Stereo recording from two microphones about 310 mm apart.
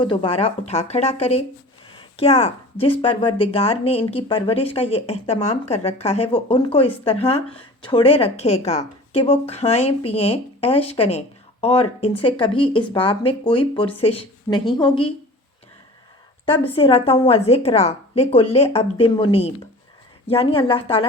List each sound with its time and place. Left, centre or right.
0.0 s speech: centre
16.5 s speech: centre